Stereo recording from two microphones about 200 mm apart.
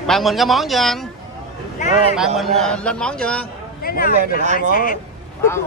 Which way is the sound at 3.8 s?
45° left (ahead or behind).